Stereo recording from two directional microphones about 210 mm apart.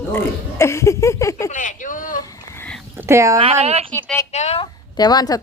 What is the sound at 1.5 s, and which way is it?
Speech, 35° left (ahead or behind).